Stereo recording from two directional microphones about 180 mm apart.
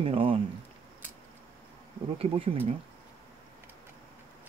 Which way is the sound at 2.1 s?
30° right (ahead or behind).